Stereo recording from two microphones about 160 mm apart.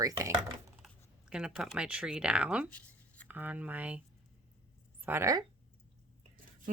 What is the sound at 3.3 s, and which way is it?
Speech, 10° right (ahead or behind).